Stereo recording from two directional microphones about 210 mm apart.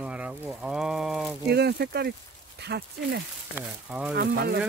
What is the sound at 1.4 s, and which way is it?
Speech, 50° right (ahead or behind).